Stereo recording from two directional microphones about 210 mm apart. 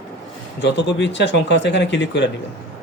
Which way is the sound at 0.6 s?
55° left (ahead or behind).